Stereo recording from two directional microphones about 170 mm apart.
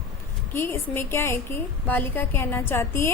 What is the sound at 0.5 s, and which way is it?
A woman's voice, 15° left (ahead or behind).